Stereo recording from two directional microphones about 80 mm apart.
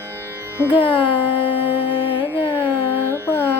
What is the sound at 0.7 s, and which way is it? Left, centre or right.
Music, left.